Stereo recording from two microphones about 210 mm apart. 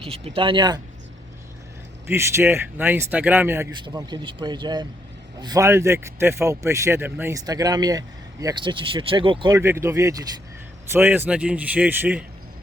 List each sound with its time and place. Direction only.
0.0 s speech: 25° right (ahead or behind)
2.0 s speech: 10° right (ahead or behind)
3.8 s speech: 20° right (ahead or behind)
9.6 s speech: 10° right (ahead or behind)